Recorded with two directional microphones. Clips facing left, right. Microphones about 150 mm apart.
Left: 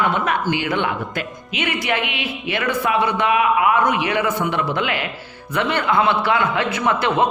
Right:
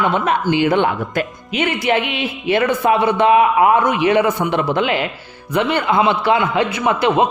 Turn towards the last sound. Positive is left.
turn(degrees=-15)  # may be behind; listen again after turning